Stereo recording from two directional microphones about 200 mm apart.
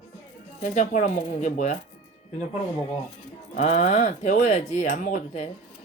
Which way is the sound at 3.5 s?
35° left (ahead or behind).